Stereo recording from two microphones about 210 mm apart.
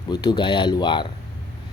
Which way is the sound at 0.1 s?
20° left (ahead or behind).